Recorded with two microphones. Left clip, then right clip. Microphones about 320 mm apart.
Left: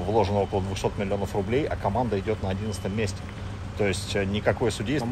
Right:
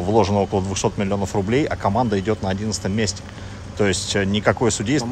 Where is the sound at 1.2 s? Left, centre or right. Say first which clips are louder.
Right 7 dB; right.